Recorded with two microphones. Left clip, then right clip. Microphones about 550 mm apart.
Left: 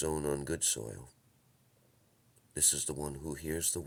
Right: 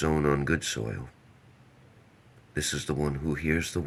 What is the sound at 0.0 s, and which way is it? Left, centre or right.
Speech, left.